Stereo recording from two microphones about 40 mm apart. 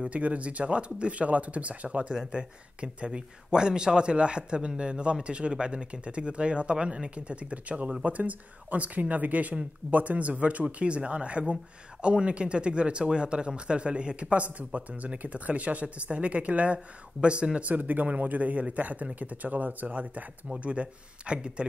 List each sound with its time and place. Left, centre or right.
0.0 s speech: right
2.0 s speech: right
14.4 s speech: right
17.6 s speech: right
20.6 s speech: right